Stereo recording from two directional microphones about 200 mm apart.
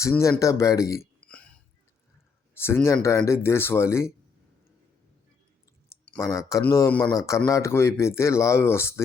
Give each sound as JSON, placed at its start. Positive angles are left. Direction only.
{"t": 0.0, "sound": "speech", "side_deg": 15}
{"t": 2.6, "sound": "speech", "side_deg": 10}
{"t": 5.9, "sound": "clicking", "side_deg": 15}
{"t": 6.3, "sound": "speech", "side_deg": 15}